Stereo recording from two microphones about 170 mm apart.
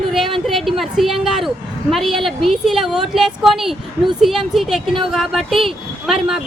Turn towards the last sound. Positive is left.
turn(degrees=0)  # may be behind; listen again after turning